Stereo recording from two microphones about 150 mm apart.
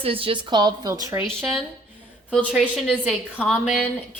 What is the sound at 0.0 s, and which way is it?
A woman's voice, 40° right (ahead or behind).